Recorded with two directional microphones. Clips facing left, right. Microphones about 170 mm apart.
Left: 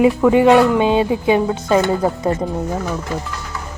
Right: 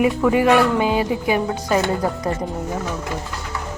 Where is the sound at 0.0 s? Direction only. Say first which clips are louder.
Left 5 dB; 25° left (ahead or behind).